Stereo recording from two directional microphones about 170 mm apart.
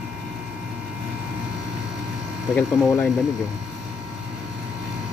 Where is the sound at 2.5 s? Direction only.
5° left (ahead or behind).